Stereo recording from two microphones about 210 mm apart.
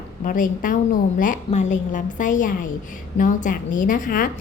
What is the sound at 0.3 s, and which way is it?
A woman's voice, 40° left (ahead or behind).